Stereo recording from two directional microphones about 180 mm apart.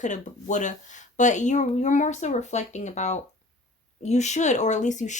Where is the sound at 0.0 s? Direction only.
45° left (ahead or behind).